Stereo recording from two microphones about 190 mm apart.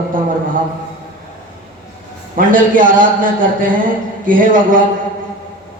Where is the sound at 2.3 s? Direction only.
45° right (ahead or behind).